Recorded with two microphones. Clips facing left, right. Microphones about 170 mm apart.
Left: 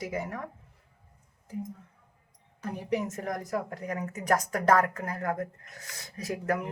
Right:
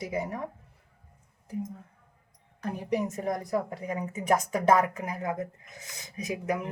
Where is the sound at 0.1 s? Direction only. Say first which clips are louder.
Right 2 dB; 25° right (ahead or behind).